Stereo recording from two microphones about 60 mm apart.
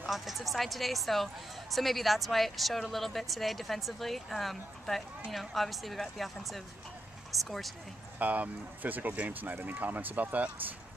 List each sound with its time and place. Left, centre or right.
0.1 s a woman's voice: centre
8.2 s speech: right